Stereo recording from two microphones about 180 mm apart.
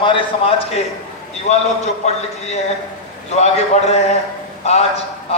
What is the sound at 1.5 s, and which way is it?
Speech, 40° left (ahead or behind).